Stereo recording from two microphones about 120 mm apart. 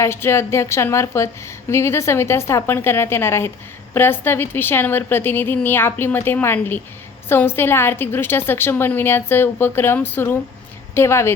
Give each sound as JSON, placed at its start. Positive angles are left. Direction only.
{"t": 0.0, "sound": "a woman's voice", "side_deg": 20}